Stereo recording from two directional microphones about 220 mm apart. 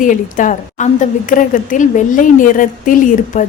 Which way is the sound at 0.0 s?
35° left (ahead or behind).